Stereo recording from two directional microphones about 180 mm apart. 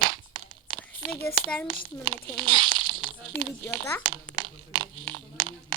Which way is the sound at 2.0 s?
25° right (ahead or behind).